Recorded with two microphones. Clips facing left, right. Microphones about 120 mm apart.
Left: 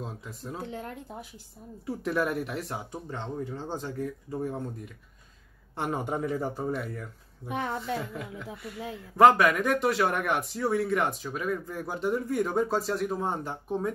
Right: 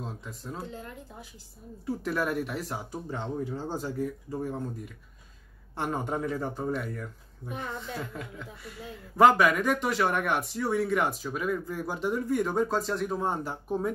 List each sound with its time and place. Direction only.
0.0 s speech: centre (ahead or behind)
0.6 s speech: 65° left (ahead or behind)
1.9 s speech: centre (ahead or behind)
5.8 s speech: 5° left (ahead or behind)
7.4 s speech: 75° left (ahead or behind)
8.0 s speech: 5° left (ahead or behind)